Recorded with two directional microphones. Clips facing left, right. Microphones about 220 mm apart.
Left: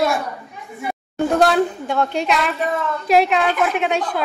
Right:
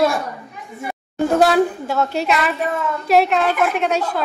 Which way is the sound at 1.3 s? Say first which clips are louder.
Right 2 dB; 5° right (ahead or behind).